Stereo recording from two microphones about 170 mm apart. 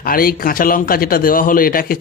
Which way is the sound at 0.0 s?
60° left (ahead or behind).